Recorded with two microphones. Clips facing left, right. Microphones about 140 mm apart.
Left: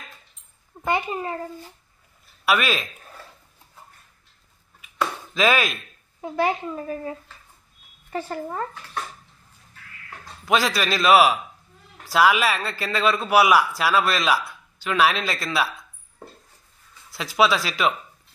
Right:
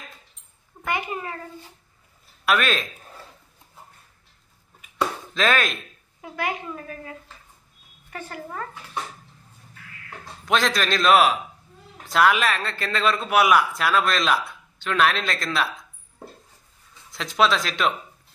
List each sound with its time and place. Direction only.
0.8 s a child's voice: 25° left (ahead or behind)
2.4 s a man's voice: 5° left (ahead or behind)
5.3 s a man's voice: 5° left (ahead or behind)
6.2 s a woman's voice: 30° left (ahead or behind)
10.0 s a man's voice: 5° left (ahead or behind)
17.1 s a man's voice: 5° left (ahead or behind)